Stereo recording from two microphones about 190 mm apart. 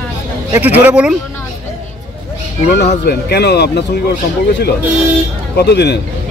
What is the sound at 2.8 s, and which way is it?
A man's voice, 60° left (ahead or behind).